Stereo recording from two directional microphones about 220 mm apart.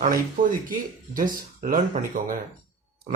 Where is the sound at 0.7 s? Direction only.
40° right (ahead or behind).